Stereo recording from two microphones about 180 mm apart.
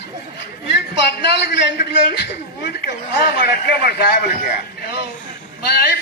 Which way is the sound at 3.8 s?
60° left (ahead or behind).